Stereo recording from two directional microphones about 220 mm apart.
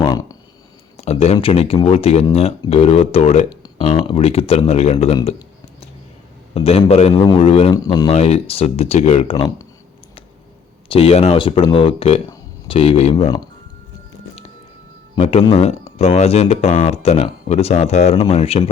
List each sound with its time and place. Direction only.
0.9 s speech: 30° left (ahead or behind)
6.5 s speech: 25° left (ahead or behind)
10.8 s speech: 25° left (ahead or behind)
15.2 s speech: 25° left (ahead or behind)